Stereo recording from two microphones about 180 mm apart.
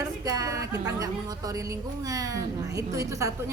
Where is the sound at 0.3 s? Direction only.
20° right (ahead or behind).